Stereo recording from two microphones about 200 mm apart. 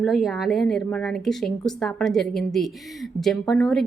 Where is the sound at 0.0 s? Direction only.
Centre (ahead or behind).